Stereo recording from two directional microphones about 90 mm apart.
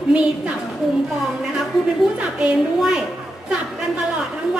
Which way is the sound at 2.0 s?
Centre (ahead or behind).